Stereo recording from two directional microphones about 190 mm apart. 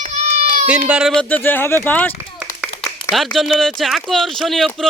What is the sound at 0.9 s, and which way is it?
Speech, 5° right (ahead or behind).